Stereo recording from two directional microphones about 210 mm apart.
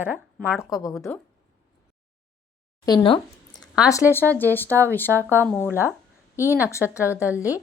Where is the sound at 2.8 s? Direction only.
20° left (ahead or behind).